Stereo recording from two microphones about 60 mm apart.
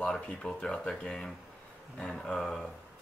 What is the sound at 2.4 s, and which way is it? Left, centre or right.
Speech, centre.